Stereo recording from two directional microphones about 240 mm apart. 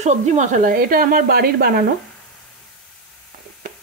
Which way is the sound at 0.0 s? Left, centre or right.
Right.